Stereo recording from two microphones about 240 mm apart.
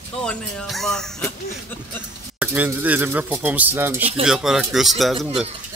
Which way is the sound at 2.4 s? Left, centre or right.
Centre.